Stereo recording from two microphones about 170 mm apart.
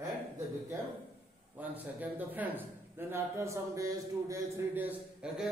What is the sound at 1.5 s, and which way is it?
A man's voice, 10° right (ahead or behind).